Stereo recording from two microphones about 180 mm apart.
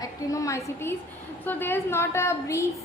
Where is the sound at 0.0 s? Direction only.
15° left (ahead or behind).